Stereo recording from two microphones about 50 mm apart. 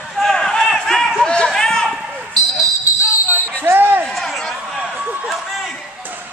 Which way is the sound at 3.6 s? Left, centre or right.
Right.